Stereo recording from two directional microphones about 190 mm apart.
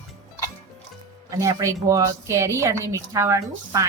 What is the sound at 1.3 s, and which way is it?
A woman's voice, 15° right (ahead or behind).